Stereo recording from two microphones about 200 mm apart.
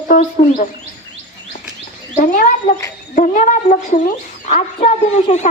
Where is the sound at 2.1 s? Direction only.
40° left (ahead or behind).